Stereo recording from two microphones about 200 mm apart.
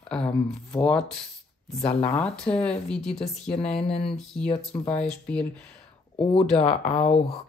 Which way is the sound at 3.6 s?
30° left (ahead or behind).